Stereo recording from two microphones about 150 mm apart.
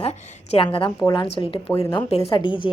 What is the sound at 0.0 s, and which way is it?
A woman's voice, 40° left (ahead or behind).